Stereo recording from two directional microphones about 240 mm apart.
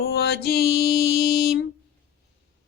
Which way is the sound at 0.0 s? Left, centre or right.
Left.